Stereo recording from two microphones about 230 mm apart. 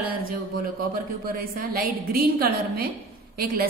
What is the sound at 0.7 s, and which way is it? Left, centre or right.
A woman's voice, right.